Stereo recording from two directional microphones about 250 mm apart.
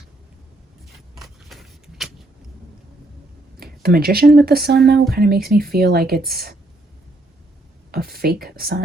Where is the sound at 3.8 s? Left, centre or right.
Right.